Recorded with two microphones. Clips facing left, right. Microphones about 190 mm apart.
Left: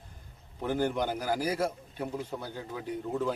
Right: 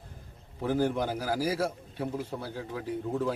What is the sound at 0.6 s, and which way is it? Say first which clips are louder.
A man's voice: right 2 dB; centre (ahead or behind).